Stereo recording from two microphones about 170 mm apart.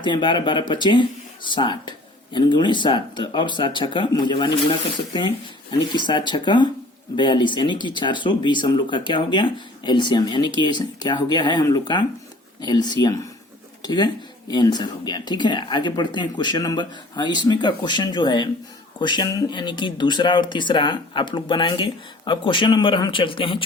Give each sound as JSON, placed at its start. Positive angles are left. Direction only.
{"t": 0.0, "sound": "speech", "side_deg": 30}